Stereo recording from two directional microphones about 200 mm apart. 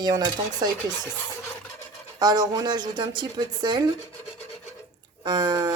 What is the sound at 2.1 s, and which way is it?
Speech, 20° right (ahead or behind).